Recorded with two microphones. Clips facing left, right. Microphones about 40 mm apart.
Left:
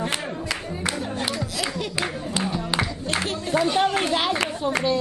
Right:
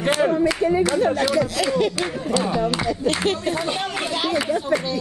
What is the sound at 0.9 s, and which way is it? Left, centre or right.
Speech, right.